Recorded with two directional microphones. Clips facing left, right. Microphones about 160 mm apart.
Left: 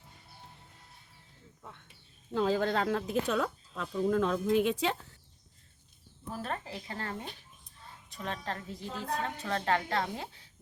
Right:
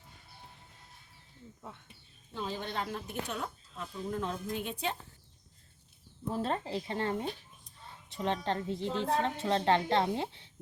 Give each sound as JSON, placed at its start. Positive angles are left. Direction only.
{"t": 2.4, "sound": "speech", "side_deg": 90}
{"t": 6.2, "sound": "a woman's voice", "side_deg": -25}